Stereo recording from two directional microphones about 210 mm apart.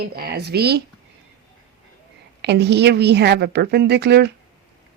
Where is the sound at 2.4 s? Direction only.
55° right (ahead or behind).